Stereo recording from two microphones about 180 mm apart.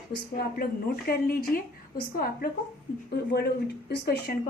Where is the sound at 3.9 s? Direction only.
65° left (ahead or behind).